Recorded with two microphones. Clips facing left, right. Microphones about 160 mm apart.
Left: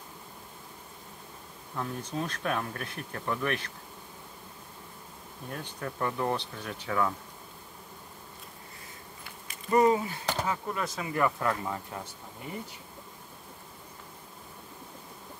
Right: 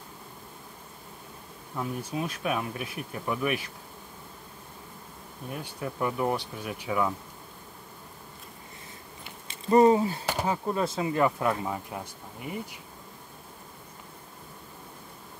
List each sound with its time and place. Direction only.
1.8 s bee: 10° right (ahead or behind)
5.5 s bee: 10° right (ahead or behind)
9.2 s a sound: 25° right (ahead or behind)
10.4 s speech: 30° right (ahead or behind)